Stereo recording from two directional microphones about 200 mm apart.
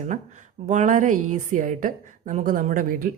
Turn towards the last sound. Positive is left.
turn(degrees=-45)  # may be behind; listen again after turning